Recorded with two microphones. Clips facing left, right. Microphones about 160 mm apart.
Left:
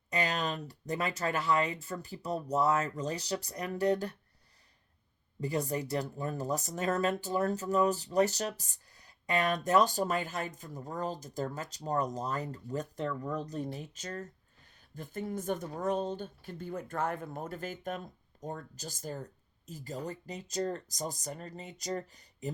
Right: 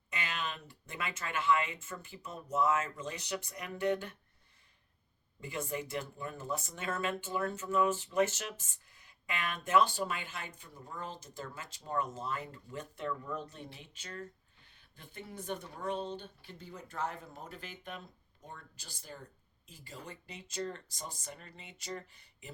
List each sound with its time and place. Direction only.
0.1 s speech: 40° left (ahead or behind)
5.4 s speech: 35° left (ahead or behind)